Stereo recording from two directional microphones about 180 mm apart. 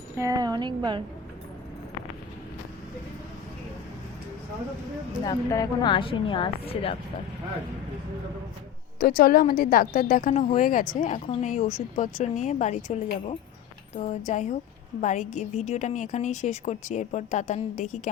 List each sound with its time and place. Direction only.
0.2 s a woman's voice: 20° right (ahead or behind)
5.2 s a woman's voice: 20° left (ahead or behind)
9.0 s a woman's voice: 55° left (ahead or behind); by 18.1 s 40° left (ahead or behind)